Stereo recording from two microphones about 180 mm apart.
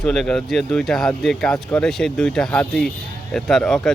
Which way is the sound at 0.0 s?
5° left (ahead or behind).